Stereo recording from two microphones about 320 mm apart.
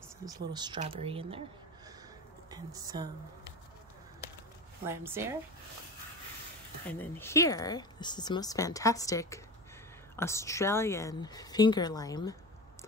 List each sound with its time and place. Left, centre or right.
0.5 s speech: centre
2.5 s speech: centre
4.8 s speech: centre
6.9 s speech: centre